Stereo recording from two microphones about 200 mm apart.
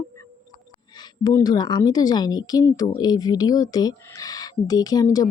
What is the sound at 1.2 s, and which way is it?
Speech, 15° left (ahead or behind).